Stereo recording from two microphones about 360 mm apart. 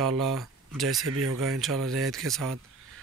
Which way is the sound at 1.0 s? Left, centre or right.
Right.